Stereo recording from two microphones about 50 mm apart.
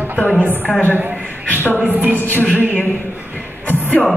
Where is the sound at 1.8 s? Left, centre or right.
Right.